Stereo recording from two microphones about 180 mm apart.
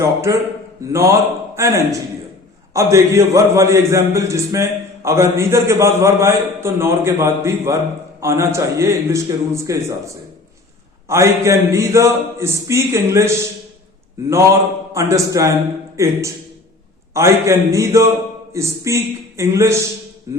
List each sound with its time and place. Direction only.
0.0 s a man's voice: 15° right (ahead or behind)
11.1 s a man's voice: 15° right (ahead or behind)
14.9 s a man's voice: 15° right (ahead or behind)
17.2 s a man's voice: 15° right (ahead or behind)
20.3 s music: 20° right (ahead or behind)